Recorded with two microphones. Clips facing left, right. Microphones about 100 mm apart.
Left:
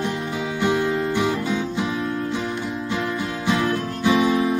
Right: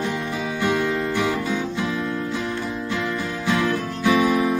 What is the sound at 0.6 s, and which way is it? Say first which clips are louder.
Music: left 1 dB; 20° left (ahead or behind).